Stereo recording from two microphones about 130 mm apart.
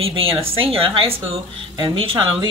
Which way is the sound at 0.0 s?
45° right (ahead or behind).